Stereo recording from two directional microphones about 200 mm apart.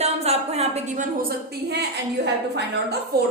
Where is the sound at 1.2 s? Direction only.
50° right (ahead or behind).